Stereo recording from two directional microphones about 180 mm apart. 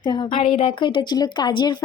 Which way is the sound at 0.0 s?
25° left (ahead or behind).